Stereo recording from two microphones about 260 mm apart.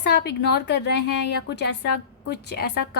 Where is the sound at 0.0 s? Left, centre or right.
Left.